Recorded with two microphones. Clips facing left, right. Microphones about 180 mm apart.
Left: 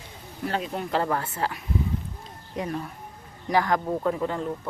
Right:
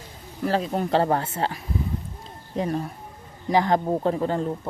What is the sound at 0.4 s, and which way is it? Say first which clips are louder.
Speech: right 5 dB; 35° right (ahead or behind).